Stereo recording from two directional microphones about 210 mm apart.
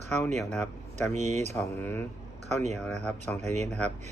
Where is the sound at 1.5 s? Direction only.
10° left (ahead or behind).